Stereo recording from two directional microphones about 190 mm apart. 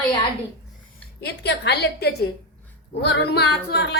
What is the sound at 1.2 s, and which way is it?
Speech, 60° left (ahead or behind).